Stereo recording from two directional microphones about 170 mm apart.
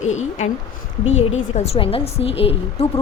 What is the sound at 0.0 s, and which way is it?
A woman's voice, 45° left (ahead or behind).